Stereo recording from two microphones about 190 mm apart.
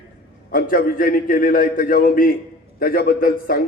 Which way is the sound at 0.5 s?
50° left (ahead or behind).